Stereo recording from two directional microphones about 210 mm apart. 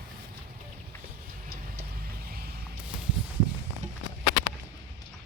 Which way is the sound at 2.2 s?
45° right (ahead or behind).